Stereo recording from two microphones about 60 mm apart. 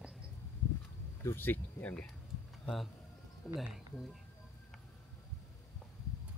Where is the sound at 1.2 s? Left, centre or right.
Left.